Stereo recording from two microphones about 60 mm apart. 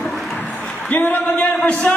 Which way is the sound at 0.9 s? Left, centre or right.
Left.